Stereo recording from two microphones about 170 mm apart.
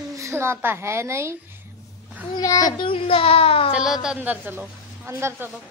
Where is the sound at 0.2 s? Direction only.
15° right (ahead or behind).